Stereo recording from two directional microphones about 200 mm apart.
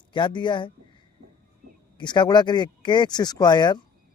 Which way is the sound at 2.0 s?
20° left (ahead or behind).